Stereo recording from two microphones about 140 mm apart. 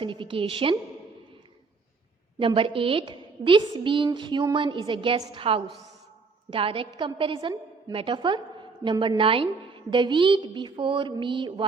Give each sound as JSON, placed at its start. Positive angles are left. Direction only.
{"t": 0.0, "sound": "a woman's voice", "side_deg": -35}
{"t": 2.4, "sound": "a woman's voice", "side_deg": -35}